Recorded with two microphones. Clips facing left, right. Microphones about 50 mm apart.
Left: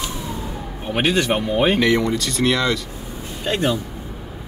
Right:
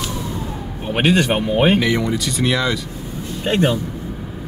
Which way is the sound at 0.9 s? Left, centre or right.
Right.